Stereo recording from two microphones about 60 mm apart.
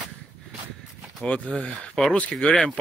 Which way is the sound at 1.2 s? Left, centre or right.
Left.